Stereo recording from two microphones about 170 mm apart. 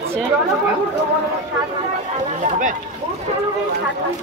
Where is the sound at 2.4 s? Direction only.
50° right (ahead or behind).